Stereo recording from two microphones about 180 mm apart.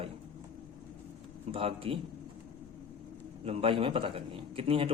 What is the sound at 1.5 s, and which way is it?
Speech, 30° right (ahead or behind).